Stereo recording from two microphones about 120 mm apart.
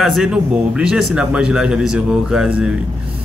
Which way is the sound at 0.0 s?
Centre (ahead or behind).